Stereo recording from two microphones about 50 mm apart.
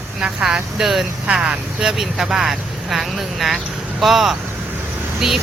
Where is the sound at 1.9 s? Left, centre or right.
Centre.